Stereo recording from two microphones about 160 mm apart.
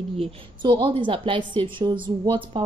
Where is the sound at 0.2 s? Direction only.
30° right (ahead or behind).